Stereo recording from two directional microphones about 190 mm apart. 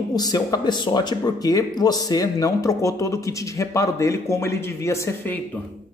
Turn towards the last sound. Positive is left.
turn(degrees=15)  # may be behind; listen again after turning